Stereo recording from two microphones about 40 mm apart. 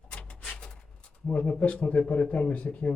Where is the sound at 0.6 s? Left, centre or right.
Left.